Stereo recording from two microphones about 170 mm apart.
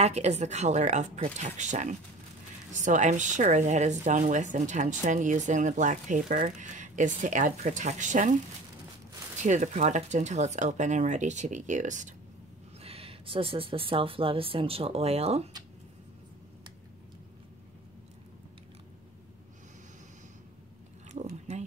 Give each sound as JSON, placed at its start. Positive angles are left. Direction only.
{"t": 0.0, "sound": "speech", "side_deg": -40}
{"t": 9.4, "sound": "speech", "side_deg": -45}
{"t": 12.8, "sound": "speech", "side_deg": -35}
{"t": 21.1, "sound": "a sound", "side_deg": -40}